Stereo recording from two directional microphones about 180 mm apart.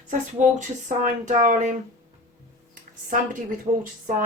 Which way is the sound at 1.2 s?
45° right (ahead or behind).